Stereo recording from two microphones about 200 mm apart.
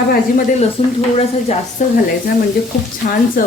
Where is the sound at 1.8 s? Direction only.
40° left (ahead or behind).